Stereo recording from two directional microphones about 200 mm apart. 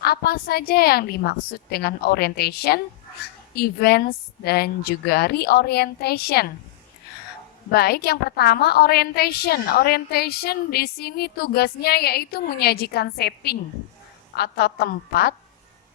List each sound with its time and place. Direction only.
0.0 s a woman's voice: 50° left (ahead or behind)
7.7 s a woman's voice: 50° left (ahead or behind)